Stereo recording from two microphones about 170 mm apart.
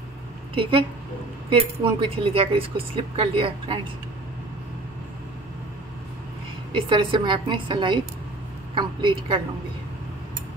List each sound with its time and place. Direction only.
0.6 s speech: 30° right (ahead or behind)
6.7 s a woman's voice: 30° right (ahead or behind)